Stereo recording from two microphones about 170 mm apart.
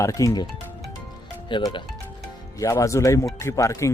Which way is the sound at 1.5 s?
30° left (ahead or behind).